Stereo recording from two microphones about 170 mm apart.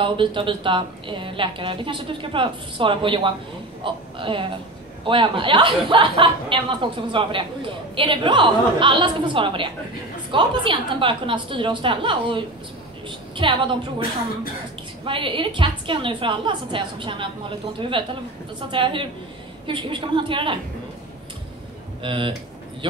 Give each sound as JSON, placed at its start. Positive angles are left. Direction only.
{"t": 0.0, "sound": "speech", "side_deg": -30}
{"t": 15.0, "sound": "speech", "side_deg": -30}
{"t": 22.0, "sound": "speech", "side_deg": -30}